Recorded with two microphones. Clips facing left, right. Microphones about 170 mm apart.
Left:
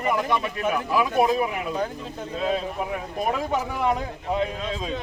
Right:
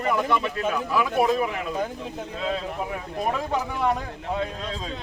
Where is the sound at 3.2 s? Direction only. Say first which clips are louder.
Left 1 dB; 10° left (ahead or behind).